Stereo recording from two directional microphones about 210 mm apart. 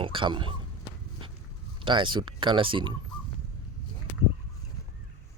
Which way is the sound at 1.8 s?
20° right (ahead or behind).